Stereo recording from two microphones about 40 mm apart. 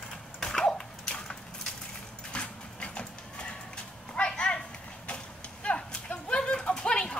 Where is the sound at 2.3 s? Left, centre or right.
Left.